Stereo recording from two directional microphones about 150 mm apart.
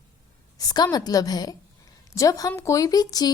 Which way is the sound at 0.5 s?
25° left (ahead or behind).